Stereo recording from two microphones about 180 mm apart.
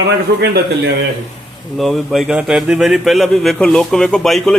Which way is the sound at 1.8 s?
Centre (ahead or behind).